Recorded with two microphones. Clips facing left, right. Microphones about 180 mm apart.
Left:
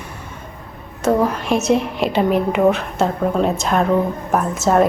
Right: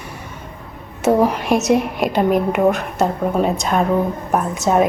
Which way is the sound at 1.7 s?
Centre (ahead or behind).